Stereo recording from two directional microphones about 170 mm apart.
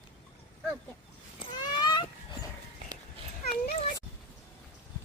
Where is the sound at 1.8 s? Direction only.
25° left (ahead or behind).